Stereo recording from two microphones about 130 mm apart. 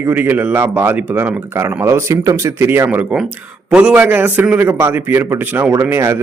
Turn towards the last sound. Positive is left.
turn(degrees=-20)  # may be behind; listen again after turning